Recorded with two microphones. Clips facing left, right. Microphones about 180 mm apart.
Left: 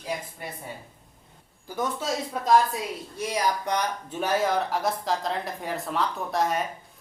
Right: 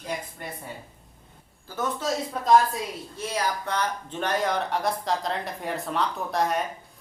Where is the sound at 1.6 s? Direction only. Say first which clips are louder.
Left 1 dB; 15° left (ahead or behind).